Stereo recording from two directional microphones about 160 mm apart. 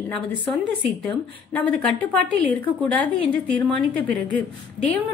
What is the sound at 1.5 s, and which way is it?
Speech, 10° left (ahead or behind).